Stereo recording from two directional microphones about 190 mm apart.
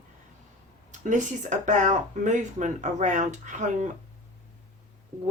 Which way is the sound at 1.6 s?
40° right (ahead or behind).